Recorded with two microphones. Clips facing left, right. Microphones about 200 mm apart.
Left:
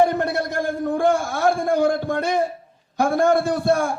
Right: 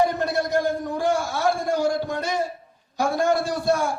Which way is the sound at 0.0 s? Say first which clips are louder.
Left 3 dB; 55° left (ahead or behind).